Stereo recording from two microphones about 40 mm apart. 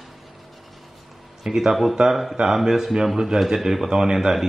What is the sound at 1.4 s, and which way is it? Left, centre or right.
Speech, centre.